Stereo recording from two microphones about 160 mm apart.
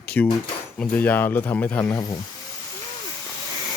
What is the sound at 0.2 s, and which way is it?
Speech, 10° left (ahead or behind).